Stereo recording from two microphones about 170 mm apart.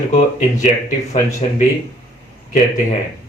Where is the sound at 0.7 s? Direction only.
40° left (ahead or behind).